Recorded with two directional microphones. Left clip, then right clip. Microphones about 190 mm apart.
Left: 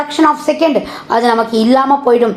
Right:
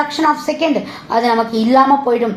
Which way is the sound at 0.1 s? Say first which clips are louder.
Left 4 dB; 25° left (ahead or behind).